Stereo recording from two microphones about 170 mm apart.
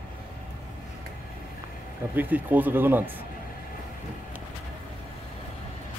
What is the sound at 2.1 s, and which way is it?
Speech, 10° right (ahead or behind).